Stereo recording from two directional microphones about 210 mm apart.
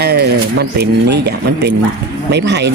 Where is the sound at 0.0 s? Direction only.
50° right (ahead or behind).